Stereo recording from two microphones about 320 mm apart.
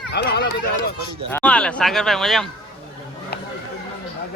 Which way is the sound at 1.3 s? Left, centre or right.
Centre.